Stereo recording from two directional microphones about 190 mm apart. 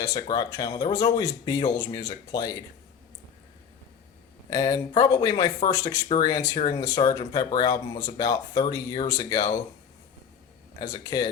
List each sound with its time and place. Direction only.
0.0 s speech: 20° left (ahead or behind)
4.4 s speech: 20° left (ahead or behind)
10.8 s speech: 20° left (ahead or behind)